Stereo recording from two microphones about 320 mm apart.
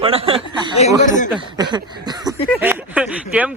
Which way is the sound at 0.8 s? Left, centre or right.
Left.